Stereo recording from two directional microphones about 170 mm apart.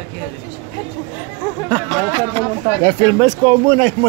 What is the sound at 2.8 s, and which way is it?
Speech, 30° right (ahead or behind).